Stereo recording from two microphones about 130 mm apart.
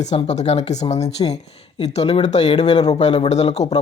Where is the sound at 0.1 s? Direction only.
60° left (ahead or behind).